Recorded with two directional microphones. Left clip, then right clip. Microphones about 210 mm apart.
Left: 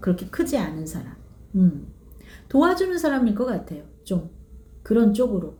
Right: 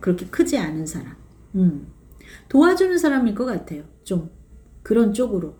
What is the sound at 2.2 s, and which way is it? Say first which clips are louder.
A woman's voice: right 3 dB; 5° right (ahead or behind).